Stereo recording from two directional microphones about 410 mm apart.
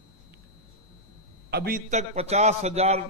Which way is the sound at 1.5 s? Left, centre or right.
Right.